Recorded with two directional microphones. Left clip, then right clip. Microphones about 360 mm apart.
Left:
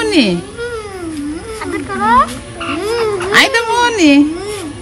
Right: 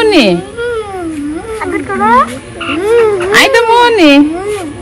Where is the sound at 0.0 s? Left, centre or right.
Centre.